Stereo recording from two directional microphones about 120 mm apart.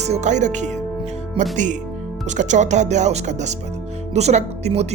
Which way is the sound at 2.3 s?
85° right.